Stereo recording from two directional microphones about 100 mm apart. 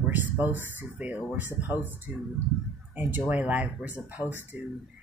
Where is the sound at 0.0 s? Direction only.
15° right (ahead or behind).